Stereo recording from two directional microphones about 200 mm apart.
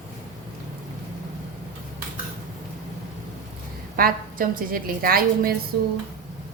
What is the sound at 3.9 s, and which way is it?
A woman's voice, 45° right (ahead or behind).